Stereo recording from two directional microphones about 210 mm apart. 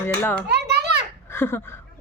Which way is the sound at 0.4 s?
50° right (ahead or behind).